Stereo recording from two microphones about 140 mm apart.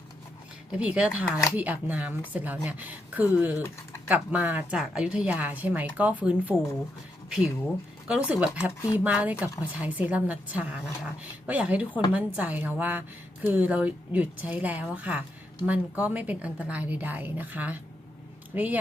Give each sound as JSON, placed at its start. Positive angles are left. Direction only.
{"t": 0.7, "sound": "a woman's voice", "side_deg": -10}